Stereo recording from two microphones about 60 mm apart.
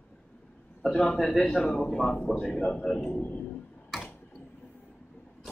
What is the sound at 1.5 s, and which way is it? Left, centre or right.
Speech, centre.